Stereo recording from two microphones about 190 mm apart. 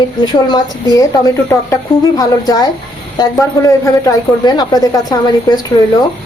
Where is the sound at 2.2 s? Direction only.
20° left (ahead or behind).